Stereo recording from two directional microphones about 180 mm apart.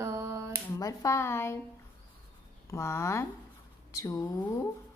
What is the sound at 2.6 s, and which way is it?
A woman's voice, 15° left (ahead or behind).